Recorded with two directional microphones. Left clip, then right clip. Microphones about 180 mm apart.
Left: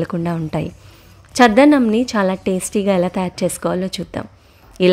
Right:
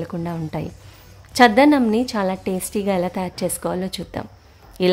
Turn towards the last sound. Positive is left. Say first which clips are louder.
# left 4 dB
turn(degrees=15)  # may be behind; listen again after turning